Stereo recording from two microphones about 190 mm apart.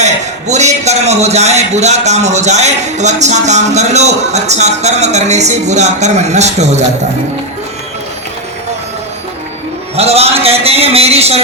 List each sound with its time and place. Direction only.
0.0 s a man's voice: 35° right (ahead or behind)
9.9 s a man's voice: 35° right (ahead or behind)